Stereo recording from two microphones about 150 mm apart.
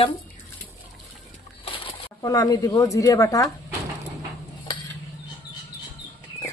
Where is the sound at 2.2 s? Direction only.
25° left (ahead or behind).